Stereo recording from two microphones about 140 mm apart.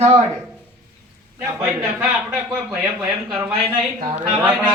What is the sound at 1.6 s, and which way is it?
Speech, 15° right (ahead or behind).